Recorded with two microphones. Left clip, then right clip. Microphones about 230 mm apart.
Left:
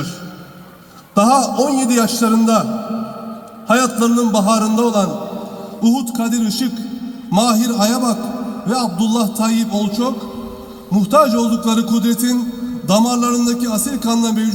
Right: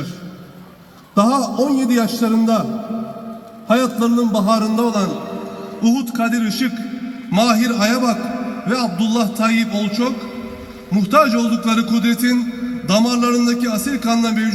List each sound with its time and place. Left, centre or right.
1.1 s a man's voice: left